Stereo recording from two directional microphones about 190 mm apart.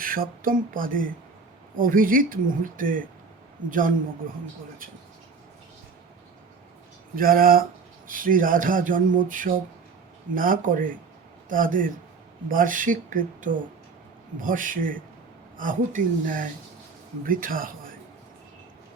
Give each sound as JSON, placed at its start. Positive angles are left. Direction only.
{"t": 0.0, "sound": "speech", "side_deg": -45}
{"t": 7.2, "sound": "speech", "side_deg": -50}